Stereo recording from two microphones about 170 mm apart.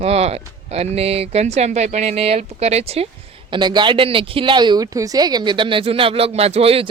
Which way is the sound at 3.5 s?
25° right (ahead or behind).